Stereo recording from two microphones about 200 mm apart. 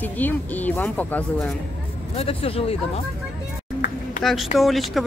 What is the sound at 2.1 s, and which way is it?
Speech, 30° left (ahead or behind).